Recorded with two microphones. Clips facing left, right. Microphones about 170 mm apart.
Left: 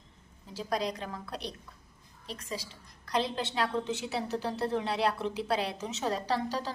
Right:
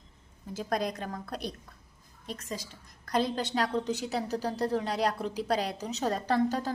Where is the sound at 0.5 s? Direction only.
50° right (ahead or behind).